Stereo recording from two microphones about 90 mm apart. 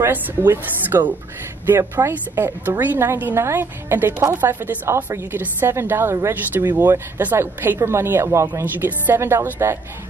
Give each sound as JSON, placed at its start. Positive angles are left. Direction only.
{"t": 0.0, "sound": "speech", "side_deg": -25}